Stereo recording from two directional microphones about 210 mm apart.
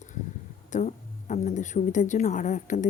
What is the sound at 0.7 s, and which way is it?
Speech, 35° left (ahead or behind).